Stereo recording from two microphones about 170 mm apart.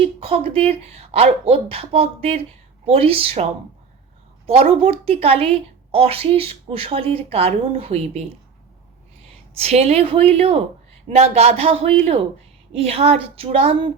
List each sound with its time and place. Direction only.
0.2 s speech: 35° right (ahead or behind)
4.4 s speech: 35° right (ahead or behind)
9.6 s speech: 35° right (ahead or behind)